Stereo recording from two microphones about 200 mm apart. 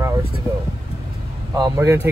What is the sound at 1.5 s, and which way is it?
Speech, 15° right (ahead or behind).